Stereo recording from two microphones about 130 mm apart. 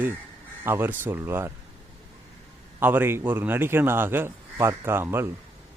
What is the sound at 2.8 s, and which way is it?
A man's voice, 15° right (ahead or behind).